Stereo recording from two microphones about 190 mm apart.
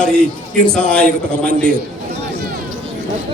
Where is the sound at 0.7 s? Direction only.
5° left (ahead or behind).